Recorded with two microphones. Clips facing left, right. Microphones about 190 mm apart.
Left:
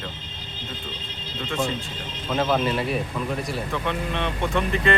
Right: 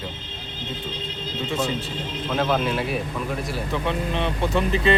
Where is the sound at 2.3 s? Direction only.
Centre (ahead or behind).